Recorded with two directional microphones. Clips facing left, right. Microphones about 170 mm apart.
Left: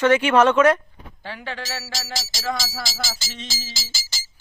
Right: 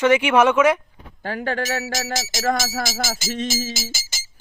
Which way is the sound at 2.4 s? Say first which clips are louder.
Right 6 dB; 50° right (ahead or behind).